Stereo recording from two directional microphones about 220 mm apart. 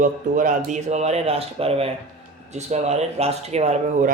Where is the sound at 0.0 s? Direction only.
35° right (ahead or behind).